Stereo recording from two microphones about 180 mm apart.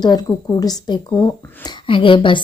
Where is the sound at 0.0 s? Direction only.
25° left (ahead or behind).